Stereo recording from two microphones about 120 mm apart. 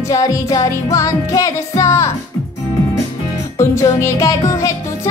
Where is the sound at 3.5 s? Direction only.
25° left (ahead or behind).